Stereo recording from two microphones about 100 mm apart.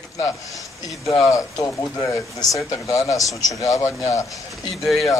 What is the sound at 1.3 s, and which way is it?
Speech, 35° left (ahead or behind).